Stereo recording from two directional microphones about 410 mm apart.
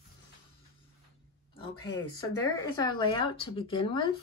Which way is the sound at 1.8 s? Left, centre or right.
Centre.